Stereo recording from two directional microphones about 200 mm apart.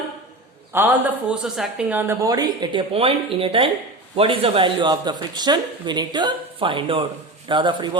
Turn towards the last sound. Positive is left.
turn(degrees=-25)  # may be behind; listen again after turning